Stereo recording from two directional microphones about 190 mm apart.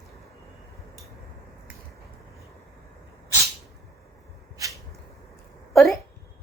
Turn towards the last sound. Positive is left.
turn(degrees=0)  # may be behind; listen again after turning